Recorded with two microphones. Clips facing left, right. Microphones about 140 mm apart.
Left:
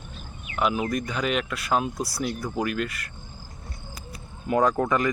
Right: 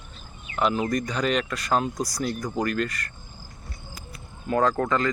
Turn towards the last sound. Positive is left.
turn(degrees=15)  # may be behind; listen again after turning